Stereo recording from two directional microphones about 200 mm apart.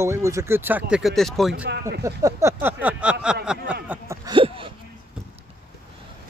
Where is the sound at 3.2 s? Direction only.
5° right (ahead or behind).